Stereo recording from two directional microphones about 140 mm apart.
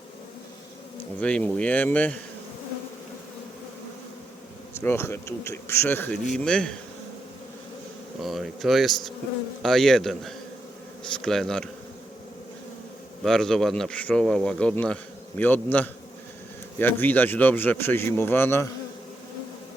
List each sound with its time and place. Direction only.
1.2 s speech: 10° left (ahead or behind)
4.7 s speech: 15° left (ahead or behind)
8.2 s speech: centre (ahead or behind)
13.2 s speech: 5° left (ahead or behind)